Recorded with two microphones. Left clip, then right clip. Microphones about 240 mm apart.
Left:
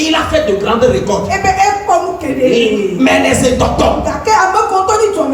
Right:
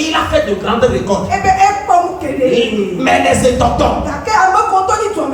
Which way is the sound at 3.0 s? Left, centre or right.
Left.